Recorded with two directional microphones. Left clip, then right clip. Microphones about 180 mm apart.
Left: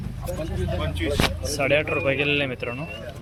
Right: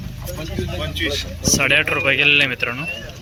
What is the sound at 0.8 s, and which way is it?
Speech, 20° left (ahead or behind).